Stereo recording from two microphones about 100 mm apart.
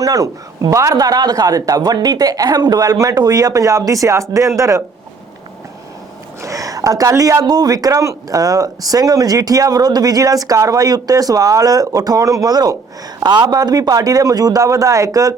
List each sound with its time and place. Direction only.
0.0 s a man's voice: 35° right (ahead or behind)
6.4 s a man's voice: 35° right (ahead or behind)